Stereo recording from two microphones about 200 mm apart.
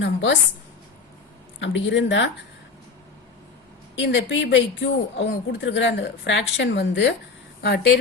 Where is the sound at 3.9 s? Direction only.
60° left (ahead or behind).